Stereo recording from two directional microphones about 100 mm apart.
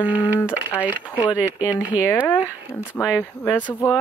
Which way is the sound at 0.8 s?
15° right (ahead or behind).